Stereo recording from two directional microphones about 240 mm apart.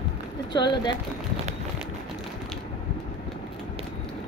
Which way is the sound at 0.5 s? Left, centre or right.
Centre.